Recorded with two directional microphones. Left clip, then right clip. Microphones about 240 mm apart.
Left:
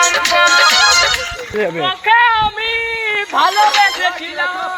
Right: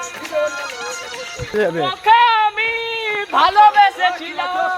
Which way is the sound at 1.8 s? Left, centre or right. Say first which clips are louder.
Left 1 dB; right.